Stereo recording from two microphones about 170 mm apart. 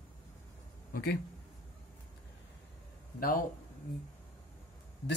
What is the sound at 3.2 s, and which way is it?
Speech, 55° left (ahead or behind).